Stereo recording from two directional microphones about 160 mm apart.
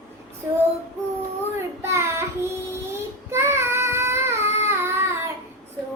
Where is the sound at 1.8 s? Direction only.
15° right (ahead or behind).